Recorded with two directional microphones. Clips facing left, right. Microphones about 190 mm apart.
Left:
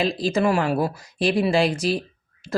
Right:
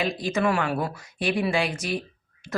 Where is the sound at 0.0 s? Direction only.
35° left (ahead or behind).